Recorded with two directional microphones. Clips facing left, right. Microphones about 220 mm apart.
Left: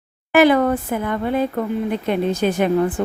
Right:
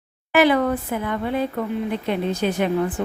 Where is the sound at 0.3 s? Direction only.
45° left (ahead or behind).